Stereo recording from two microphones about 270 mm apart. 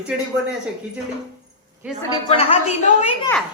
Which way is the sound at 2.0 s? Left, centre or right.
Centre.